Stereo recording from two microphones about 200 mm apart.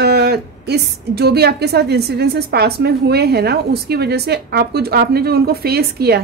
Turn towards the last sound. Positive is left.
turn(degrees=-50)  # may be behind; listen again after turning